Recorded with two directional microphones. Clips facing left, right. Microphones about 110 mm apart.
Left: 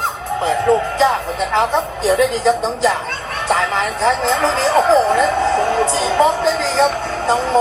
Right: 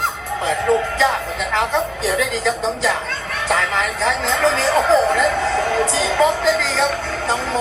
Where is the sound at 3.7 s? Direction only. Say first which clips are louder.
Left 3 dB; 30° left (ahead or behind).